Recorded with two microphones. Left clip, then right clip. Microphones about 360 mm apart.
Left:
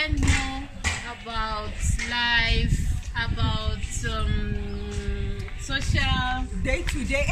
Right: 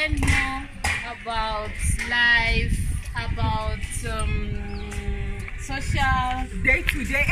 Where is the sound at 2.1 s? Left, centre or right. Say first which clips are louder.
Right 4 dB; centre.